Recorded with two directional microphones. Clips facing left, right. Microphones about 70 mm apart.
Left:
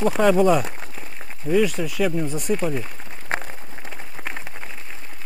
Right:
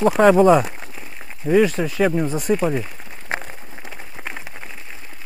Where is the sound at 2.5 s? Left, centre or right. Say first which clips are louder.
Right 4 dB; right.